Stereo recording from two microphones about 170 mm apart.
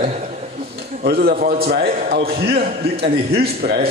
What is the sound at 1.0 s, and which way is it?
A man's voice, 65° right (ahead or behind).